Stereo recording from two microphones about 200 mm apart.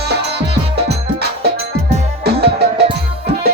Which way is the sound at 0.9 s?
55° right (ahead or behind).